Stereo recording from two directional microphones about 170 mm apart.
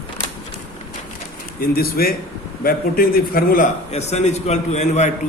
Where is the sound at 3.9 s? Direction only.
40° left (ahead or behind).